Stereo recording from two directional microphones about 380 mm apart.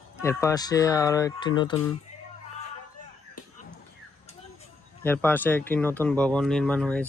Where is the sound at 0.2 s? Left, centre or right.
Centre.